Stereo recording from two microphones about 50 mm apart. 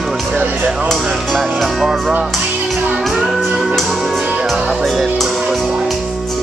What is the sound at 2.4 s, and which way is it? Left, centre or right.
Music, centre.